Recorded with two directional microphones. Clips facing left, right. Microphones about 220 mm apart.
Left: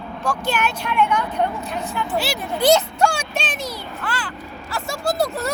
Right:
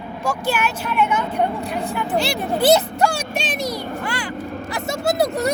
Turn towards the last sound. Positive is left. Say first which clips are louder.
# right 3 dB
turn(degrees=-20)  # may be behind; listen again after turning